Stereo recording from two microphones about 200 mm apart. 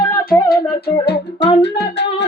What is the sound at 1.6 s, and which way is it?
Singing, 60° left (ahead or behind).